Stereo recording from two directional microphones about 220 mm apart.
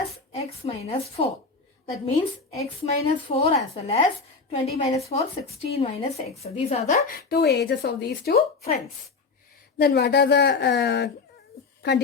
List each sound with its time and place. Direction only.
0.3 s a woman's voice: 30° left (ahead or behind)
7.2 s speech: 45° left (ahead or behind)
9.7 s speech: 50° left (ahead or behind)